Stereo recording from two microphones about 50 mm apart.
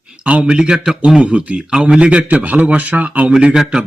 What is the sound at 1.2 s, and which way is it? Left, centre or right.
A man's voice, right.